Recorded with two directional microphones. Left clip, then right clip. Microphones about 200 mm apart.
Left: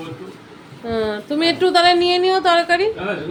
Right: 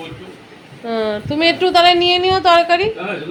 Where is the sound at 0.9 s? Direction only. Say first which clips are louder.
Right 2 dB; 5° left (ahead or behind).